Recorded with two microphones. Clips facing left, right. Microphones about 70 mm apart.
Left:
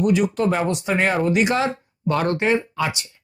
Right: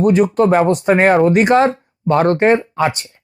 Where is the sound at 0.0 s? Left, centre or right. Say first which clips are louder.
Right 6 dB; right.